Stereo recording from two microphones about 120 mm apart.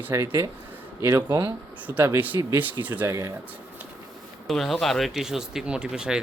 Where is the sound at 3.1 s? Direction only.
25° right (ahead or behind).